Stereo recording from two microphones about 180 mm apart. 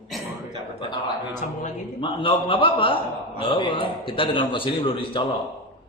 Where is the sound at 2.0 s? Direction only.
30° left (ahead or behind).